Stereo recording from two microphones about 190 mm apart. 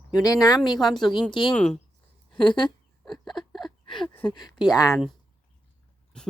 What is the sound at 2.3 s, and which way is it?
Speech, 25° left (ahead or behind).